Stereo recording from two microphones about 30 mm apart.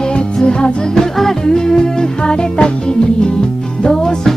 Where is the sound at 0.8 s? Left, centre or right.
Centre.